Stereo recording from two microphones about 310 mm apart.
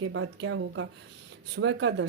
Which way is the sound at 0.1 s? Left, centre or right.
Right.